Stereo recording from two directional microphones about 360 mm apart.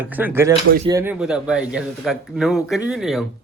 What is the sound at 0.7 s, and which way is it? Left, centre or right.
Speech, centre.